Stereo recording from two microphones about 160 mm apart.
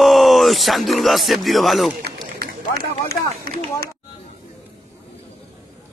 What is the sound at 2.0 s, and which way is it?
Run, 80° right.